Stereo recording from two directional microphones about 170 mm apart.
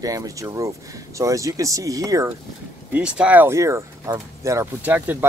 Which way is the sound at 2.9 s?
5° right (ahead or behind).